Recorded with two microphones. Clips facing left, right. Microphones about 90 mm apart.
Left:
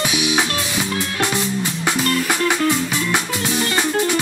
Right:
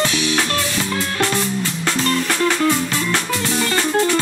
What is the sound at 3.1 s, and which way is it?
Music, 15° left (ahead or behind).